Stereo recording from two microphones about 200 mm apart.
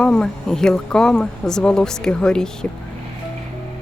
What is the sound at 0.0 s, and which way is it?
Speech, 5° left (ahead or behind).